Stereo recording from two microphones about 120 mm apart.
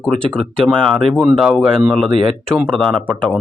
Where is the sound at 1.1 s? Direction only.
5° right (ahead or behind).